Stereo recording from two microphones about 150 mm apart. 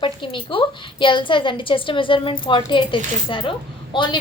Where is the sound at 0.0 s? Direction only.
35° left (ahead or behind).